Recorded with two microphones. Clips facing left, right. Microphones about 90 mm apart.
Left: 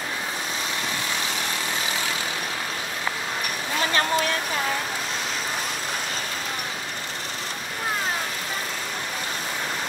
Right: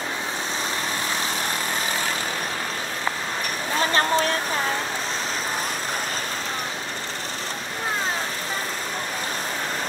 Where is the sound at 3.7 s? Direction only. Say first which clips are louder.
Right 2 dB; 35° right (ahead or behind).